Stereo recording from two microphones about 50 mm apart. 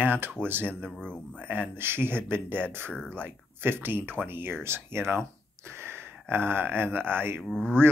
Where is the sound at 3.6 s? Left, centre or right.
Right.